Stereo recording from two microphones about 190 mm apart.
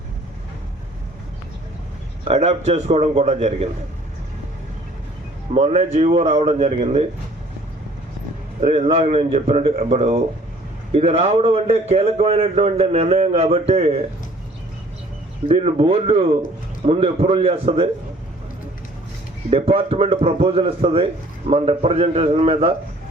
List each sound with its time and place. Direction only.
2.2 s a man's voice: 35° right (ahead or behind)
5.5 s a man's voice: 35° right (ahead or behind)
8.6 s a man's voice: 30° right (ahead or behind)
15.4 s a man's voice: 30° right (ahead or behind)
19.5 s a man's voice: 30° right (ahead or behind)